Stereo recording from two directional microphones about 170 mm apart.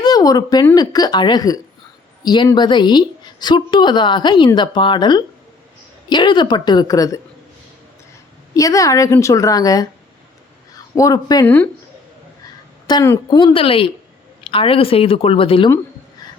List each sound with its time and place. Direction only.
0.0 s a woman's voice: 20° left (ahead or behind)
8.5 s a woman's voice: 20° left (ahead or behind)
11.4 s speech: 10° left (ahead or behind)
12.9 s a woman's voice: 20° left (ahead or behind)
16.2 s music: 25° left (ahead or behind)